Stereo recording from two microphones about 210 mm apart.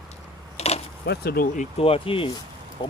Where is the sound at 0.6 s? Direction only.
30° left (ahead or behind).